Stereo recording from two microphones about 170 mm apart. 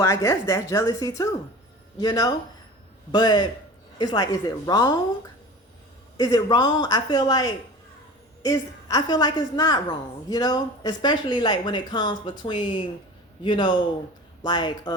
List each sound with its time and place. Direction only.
0.0 s speech: 20° left (ahead or behind)
6.1 s speech: 25° left (ahead or behind)